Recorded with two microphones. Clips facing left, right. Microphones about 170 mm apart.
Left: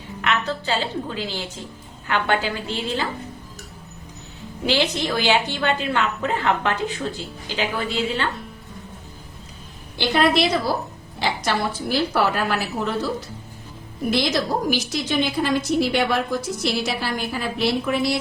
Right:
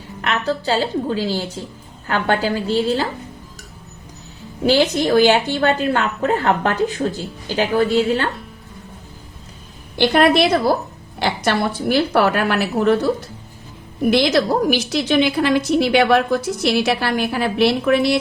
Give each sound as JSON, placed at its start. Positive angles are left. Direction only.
{"t": 0.2, "sound": "a woman's voice", "side_deg": -40}
{"t": 4.6, "sound": "a woman's voice", "side_deg": -45}
{"t": 10.0, "sound": "a woman's voice", "side_deg": -60}
{"t": 14.1, "sound": "a woman's voice", "side_deg": -70}